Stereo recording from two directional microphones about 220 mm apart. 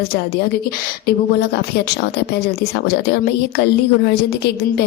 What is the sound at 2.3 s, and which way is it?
A woman's voice, 45° left (ahead or behind).